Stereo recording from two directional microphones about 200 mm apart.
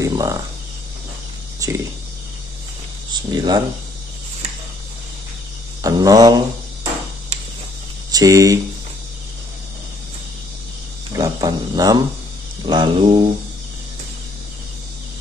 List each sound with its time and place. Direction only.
0.0 s speech: 15° right (ahead or behind)
3.1 s speech: 20° right (ahead or behind)
5.8 s speech: 15° right (ahead or behind)
8.1 s speech: 20° right (ahead or behind)
11.1 s speech: 20° right (ahead or behind)